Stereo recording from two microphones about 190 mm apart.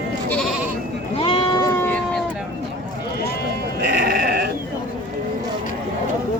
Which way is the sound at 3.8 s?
60° right (ahead or behind).